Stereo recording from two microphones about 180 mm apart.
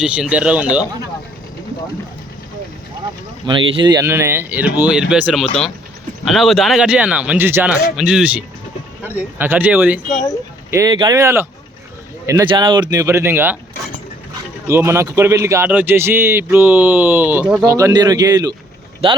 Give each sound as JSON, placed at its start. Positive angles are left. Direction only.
{"t": 0.0, "sound": "a man's voice", "side_deg": -5}
{"t": 3.4, "sound": "a man's voice", "side_deg": -30}
{"t": 14.7, "sound": "a man's voice", "side_deg": -15}
{"t": 17.7, "sound": "a man's voice", "side_deg": -15}